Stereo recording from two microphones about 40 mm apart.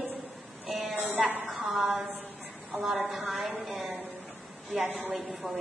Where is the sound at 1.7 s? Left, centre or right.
Centre.